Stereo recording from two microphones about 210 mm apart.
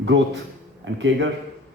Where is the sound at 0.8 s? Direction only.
60° right (ahead or behind).